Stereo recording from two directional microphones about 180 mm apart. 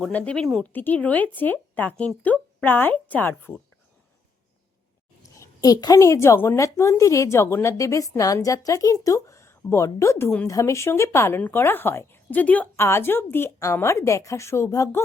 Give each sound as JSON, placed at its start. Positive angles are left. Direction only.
{"t": 0.0, "sound": "a woman's voice", "side_deg": 5}
{"t": 5.2, "sound": "a woman's voice", "side_deg": 15}